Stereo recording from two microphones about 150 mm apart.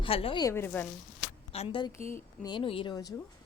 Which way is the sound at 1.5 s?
40° left (ahead or behind).